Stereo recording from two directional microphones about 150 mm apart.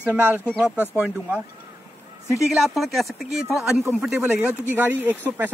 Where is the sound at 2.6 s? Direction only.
Centre (ahead or behind).